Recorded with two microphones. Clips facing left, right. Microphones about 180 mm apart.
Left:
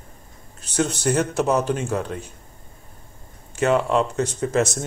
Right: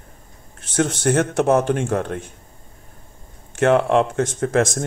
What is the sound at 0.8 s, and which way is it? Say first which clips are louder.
Speech: right 3 dB; 55° right (ahead or behind).